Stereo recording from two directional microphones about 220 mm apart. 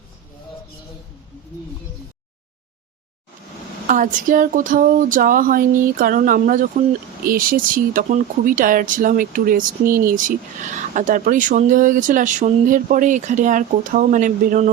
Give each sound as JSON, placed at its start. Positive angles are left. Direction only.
{"t": 3.8, "sound": "speech", "side_deg": -35}